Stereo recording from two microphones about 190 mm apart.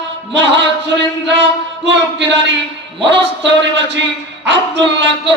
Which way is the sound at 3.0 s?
65° right (ahead or behind).